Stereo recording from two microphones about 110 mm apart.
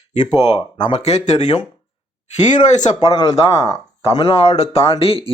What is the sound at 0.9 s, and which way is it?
Speech, 80° left.